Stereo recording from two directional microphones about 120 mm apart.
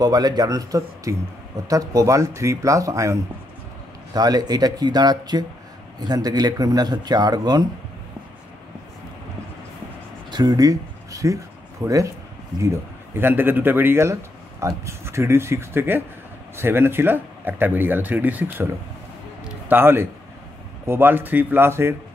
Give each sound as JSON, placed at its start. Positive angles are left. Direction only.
{"t": 0.0, "sound": "speech", "side_deg": -35}
{"t": 10.3, "sound": "speech", "side_deg": -35}
{"t": 19.7, "sound": "speech", "side_deg": -20}